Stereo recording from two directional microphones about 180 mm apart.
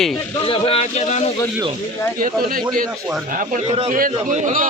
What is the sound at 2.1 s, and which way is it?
Speech, 55° right (ahead or behind).